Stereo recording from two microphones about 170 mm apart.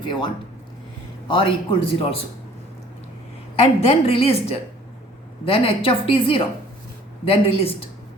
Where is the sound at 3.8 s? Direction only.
35° left (ahead or behind).